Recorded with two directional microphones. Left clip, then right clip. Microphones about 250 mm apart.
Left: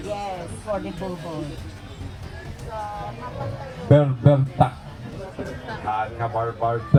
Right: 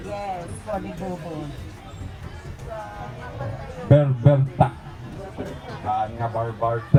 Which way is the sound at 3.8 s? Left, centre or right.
Centre.